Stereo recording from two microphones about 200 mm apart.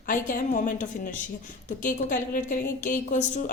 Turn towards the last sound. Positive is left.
turn(degrees=40)  # may be behind; listen again after turning